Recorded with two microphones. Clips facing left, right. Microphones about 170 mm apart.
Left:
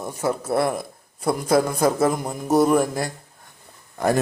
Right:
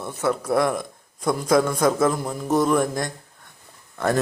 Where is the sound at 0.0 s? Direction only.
10° left (ahead or behind).